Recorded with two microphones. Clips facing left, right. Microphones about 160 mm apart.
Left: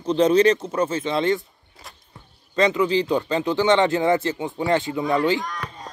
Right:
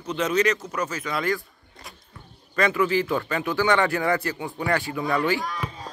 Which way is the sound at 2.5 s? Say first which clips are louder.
Left 3 dB; 20° left (ahead or behind).